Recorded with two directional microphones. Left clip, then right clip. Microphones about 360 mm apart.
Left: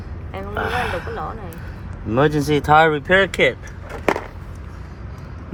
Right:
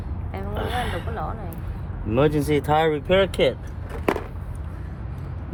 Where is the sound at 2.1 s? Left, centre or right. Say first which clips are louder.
Left 3 dB; centre.